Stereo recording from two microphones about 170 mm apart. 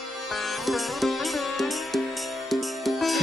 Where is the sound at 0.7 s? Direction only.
Centre (ahead or behind).